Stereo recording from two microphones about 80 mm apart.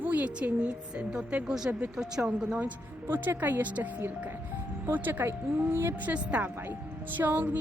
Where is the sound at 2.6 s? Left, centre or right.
Right.